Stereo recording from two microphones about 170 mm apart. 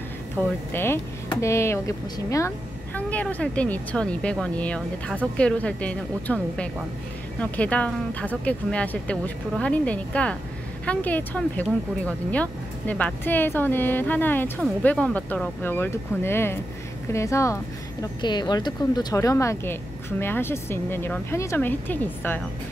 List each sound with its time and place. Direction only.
0.4 s speech: 15° left (ahead or behind)